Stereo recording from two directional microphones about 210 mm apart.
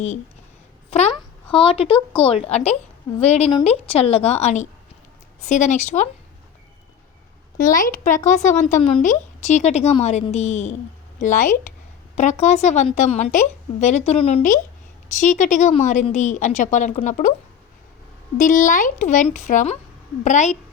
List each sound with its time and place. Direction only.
0.9 s a woman's voice: 30° left (ahead or behind)
7.6 s a woman's voice: 40° left (ahead or behind)
18.3 s a woman's voice: 40° left (ahead or behind)